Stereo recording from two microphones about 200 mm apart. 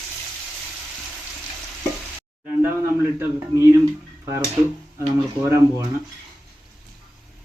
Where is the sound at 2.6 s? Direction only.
10° right (ahead or behind).